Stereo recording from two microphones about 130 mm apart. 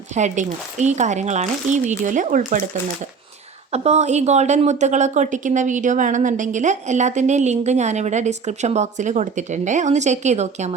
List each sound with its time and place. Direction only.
0.1 s speech: 65° right (ahead or behind)
3.7 s a woman's voice: 55° right (ahead or behind)